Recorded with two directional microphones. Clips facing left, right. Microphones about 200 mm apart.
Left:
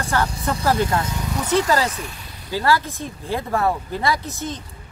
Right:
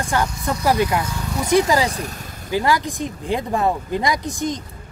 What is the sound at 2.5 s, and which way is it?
Speech, 15° right (ahead or behind).